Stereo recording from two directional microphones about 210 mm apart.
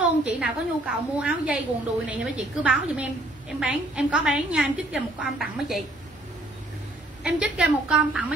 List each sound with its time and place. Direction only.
0.2 s a woman's voice: 5° right (ahead or behind)
7.2 s a woman's voice: 5° right (ahead or behind)